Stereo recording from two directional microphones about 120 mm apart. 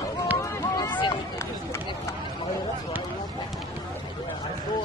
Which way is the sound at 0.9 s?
40° left (ahead or behind).